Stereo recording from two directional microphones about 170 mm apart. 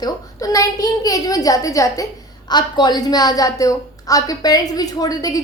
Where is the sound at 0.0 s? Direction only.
20° left (ahead or behind).